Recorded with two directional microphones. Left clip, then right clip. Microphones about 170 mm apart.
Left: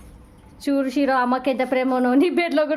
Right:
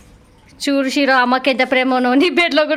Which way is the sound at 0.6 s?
10° right (ahead or behind).